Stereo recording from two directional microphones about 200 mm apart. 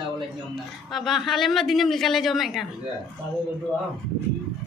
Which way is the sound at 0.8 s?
Centre (ahead or behind).